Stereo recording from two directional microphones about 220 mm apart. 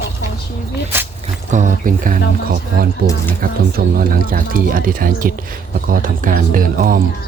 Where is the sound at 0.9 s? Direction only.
10° right (ahead or behind).